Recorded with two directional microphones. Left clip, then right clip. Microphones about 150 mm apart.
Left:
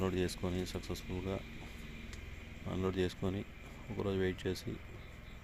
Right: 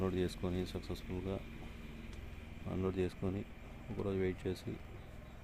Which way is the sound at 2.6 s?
Centre (ahead or behind).